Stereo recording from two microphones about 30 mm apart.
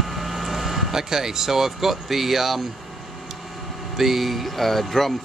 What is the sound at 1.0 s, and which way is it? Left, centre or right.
Speech, centre.